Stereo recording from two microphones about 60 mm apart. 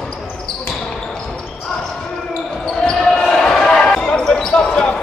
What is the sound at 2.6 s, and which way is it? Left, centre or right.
Basketball bounce, centre.